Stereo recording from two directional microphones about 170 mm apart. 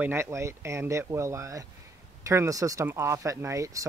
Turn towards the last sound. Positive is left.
turn(degrees=-20)  # may be behind; listen again after turning